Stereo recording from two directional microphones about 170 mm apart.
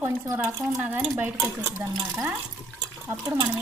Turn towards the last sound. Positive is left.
turn(degrees=-20)  # may be behind; listen again after turning